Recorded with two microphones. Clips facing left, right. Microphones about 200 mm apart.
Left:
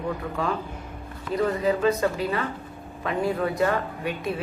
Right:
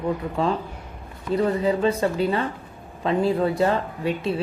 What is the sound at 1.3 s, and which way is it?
Speech, 30° right (ahead or behind).